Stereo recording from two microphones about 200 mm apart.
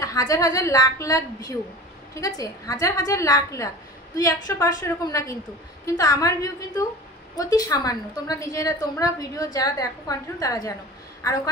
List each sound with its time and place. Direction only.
0.0 s a woman's voice: 15° left (ahead or behind)